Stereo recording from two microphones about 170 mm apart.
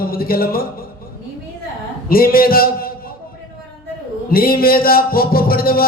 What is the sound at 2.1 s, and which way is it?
Speech, 60° left (ahead or behind).